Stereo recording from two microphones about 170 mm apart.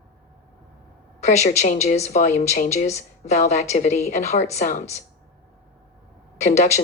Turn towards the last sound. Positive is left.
turn(degrees=45)  # may be behind; listen again after turning